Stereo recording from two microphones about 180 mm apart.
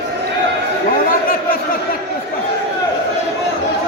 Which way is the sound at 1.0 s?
50° left (ahead or behind).